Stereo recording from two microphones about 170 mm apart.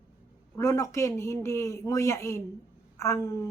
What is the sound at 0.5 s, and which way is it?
A man's voice, 15° left (ahead or behind).